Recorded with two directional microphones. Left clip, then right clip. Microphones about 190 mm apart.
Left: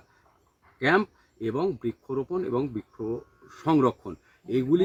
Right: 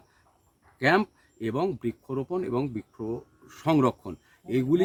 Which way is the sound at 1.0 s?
35° right (ahead or behind).